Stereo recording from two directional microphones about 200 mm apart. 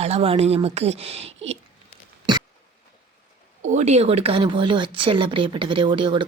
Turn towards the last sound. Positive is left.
turn(degrees=-25)  # may be behind; listen again after turning